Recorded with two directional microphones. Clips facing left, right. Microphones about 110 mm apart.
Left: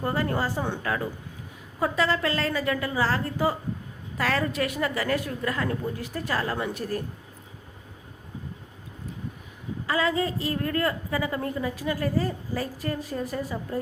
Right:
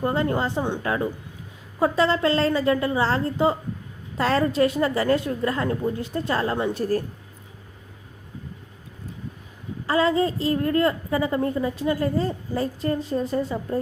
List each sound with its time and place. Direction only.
0.0 s a woman's voice: 20° right (ahead or behind)
9.8 s a woman's voice: 30° right (ahead or behind)